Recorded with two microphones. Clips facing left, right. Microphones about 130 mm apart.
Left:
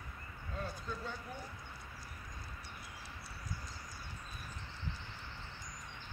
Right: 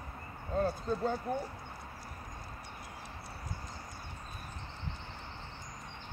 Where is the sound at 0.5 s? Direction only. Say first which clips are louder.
Right 11 dB; 45° right (ahead or behind).